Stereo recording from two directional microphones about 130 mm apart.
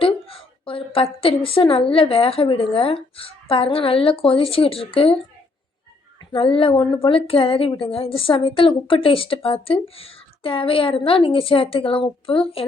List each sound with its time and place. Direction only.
0.0 s a woman's voice: 45° left (ahead or behind)
6.3 s a woman's voice: 45° left (ahead or behind)